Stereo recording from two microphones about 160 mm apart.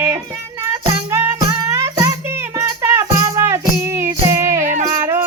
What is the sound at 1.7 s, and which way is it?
Music, 20° right (ahead or behind).